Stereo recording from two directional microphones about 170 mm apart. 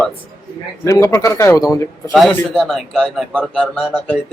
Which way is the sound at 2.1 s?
Centre (ahead or behind).